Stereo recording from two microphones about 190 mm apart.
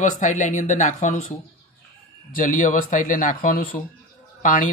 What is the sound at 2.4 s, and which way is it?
Speech, 40° left (ahead or behind).